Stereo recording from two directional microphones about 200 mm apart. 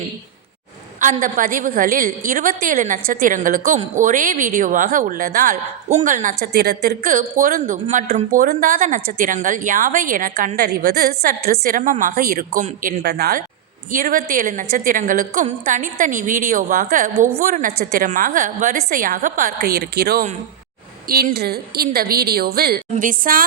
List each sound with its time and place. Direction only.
0.9 s a woman's voice: 40° right (ahead or behind)